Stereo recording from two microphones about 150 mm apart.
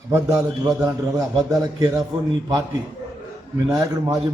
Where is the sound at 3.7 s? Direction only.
25° right (ahead or behind).